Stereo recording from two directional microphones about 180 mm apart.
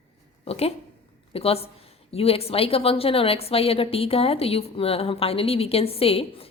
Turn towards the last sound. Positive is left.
turn(degrees=30)  # may be behind; listen again after turning